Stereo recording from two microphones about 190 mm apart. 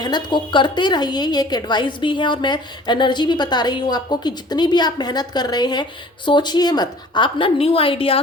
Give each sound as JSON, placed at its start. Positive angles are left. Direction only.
{"t": 0.0, "sound": "a woman's voice", "side_deg": 25}